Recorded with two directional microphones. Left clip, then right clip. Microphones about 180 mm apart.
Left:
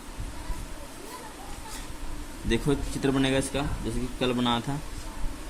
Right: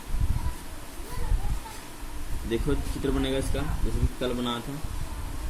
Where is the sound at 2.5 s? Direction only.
65° left (ahead or behind).